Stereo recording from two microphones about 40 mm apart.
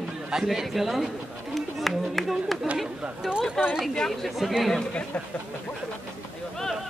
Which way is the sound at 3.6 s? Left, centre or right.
Centre.